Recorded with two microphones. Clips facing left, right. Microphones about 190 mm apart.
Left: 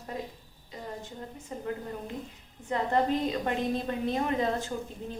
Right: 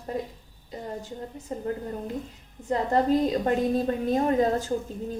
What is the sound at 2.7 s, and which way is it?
A woman's voice, 40° right (ahead or behind).